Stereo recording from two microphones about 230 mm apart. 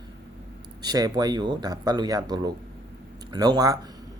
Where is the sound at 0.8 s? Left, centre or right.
Centre.